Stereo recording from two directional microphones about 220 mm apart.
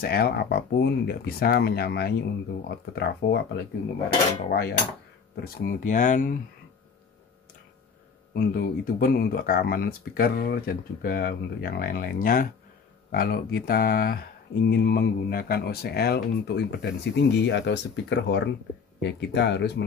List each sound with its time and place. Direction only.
0.0 s speech: 45° left (ahead or behind)
4.5 s speech: 45° left (ahead or behind)
8.4 s speech: 45° left (ahead or behind)